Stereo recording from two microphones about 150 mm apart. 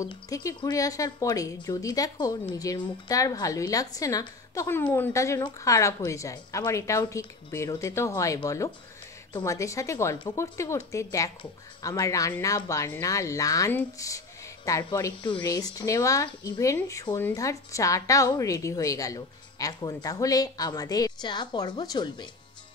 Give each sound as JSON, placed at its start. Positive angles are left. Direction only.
{"t": 0.0, "sound": "a woman's voice", "side_deg": 25}